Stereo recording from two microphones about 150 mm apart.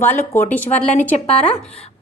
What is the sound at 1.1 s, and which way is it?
Speech, 45° left (ahead or behind).